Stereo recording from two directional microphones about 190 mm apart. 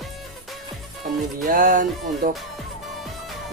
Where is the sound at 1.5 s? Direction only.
45° right (ahead or behind).